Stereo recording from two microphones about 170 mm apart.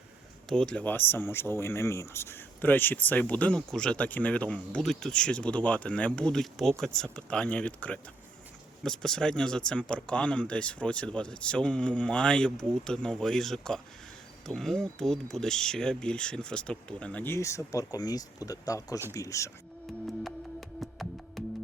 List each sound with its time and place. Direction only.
0.4 s speech: 5° left (ahead or behind)
20.2 s music: centre (ahead or behind)